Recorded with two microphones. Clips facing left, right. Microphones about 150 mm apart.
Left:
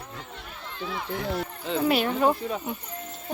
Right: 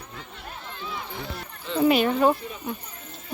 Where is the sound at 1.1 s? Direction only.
60° left (ahead or behind).